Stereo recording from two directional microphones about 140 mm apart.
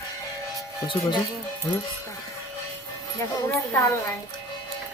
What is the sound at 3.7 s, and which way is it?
Speech, 20° left (ahead or behind).